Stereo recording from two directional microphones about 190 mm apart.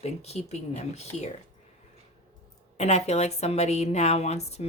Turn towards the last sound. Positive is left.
turn(degrees=35)  # may be behind; listen again after turning